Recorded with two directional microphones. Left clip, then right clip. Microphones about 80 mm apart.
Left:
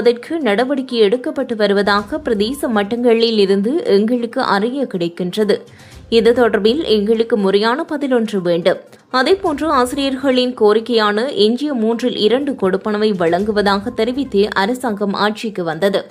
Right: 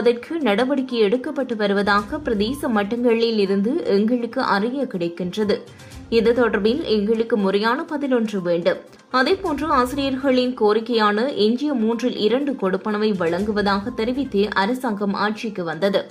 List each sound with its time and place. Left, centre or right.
0.0 s a woman's voice: left
15.8 s a woman's voice: left